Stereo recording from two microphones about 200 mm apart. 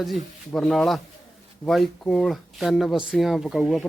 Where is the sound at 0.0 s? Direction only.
Centre (ahead or behind).